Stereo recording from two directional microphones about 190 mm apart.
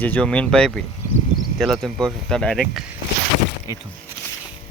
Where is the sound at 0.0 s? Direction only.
5° left (ahead or behind).